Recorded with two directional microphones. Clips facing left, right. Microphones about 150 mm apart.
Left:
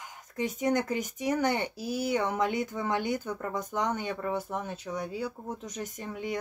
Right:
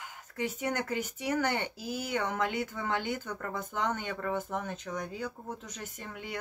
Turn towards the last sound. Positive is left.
turn(degrees=15)  # may be behind; listen again after turning